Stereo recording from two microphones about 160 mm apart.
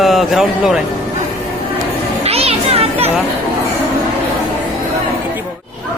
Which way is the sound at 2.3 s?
40° right (ahead or behind).